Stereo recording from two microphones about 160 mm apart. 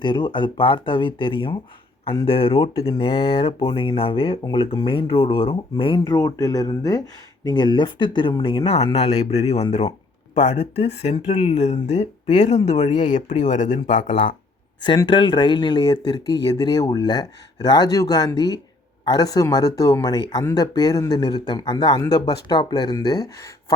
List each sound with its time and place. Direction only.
0.0 s speech: 30° left (ahead or behind); by 14.2 s 50° left (ahead or behind)
14.8 s speech: 30° left (ahead or behind)